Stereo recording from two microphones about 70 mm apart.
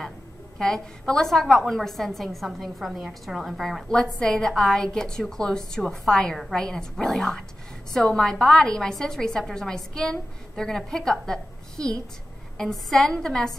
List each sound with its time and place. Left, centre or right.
0.6 s a woman's voice: centre